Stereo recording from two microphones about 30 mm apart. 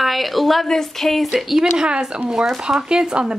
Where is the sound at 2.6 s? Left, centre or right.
Right.